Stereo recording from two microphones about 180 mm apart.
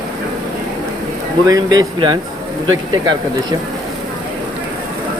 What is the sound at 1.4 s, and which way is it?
Speech, 20° right (ahead or behind).